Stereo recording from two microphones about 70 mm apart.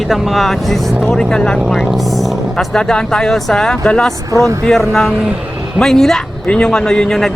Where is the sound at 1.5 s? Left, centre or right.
Centre.